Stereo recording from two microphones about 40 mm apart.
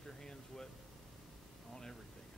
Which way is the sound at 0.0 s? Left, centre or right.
Centre.